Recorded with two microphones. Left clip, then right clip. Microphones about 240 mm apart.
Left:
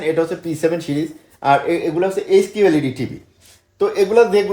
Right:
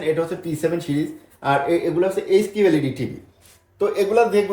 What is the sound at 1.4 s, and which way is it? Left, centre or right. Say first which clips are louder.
Speech: left 4 dB; left.